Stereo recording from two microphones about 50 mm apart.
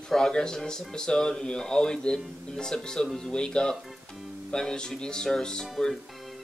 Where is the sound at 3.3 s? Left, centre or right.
Centre.